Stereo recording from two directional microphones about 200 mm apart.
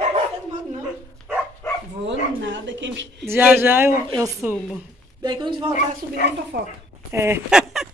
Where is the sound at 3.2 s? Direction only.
10° right (ahead or behind).